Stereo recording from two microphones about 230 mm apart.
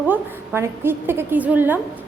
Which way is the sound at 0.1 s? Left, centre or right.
Centre.